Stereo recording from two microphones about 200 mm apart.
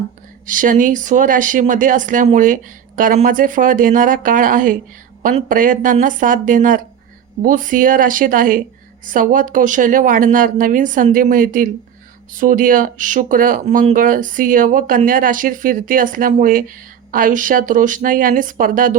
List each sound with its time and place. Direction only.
0.4 s speech: 40° right (ahead or behind)